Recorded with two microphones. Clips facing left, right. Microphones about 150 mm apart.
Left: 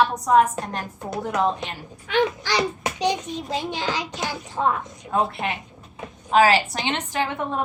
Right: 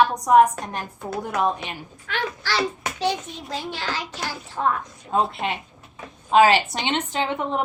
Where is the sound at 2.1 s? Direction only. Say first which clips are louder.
Left 6 dB; 15° left (ahead or behind).